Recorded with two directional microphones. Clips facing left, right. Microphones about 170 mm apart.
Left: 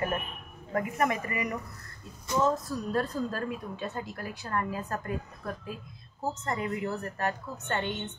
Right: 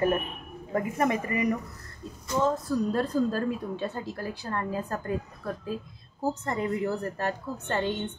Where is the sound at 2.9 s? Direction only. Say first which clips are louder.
Right 1 dB; 30° right (ahead or behind).